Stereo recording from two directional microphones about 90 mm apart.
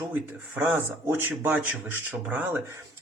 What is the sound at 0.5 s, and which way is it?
Speech, 25° right (ahead or behind).